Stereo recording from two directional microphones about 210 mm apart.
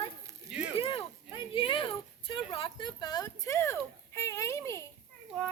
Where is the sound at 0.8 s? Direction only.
25° left (ahead or behind).